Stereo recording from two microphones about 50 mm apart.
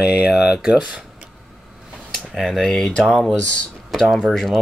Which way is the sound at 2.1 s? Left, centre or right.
Centre.